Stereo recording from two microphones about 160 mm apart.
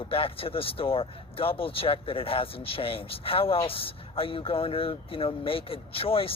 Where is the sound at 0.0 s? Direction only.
35° left (ahead or behind).